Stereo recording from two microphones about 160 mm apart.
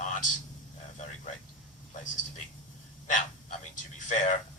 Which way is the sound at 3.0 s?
50° left (ahead or behind).